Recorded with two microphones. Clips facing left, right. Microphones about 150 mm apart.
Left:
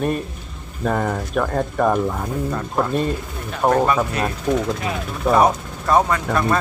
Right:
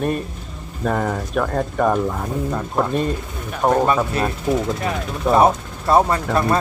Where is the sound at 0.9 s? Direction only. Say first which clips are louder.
Even; centre (ahead or behind).